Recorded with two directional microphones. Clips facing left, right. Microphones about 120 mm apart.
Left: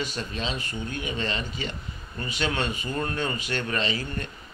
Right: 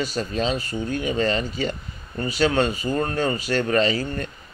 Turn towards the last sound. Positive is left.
turn(degrees=-40)  # may be behind; listen again after turning